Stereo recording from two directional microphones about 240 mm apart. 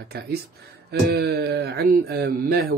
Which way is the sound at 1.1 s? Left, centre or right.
Right.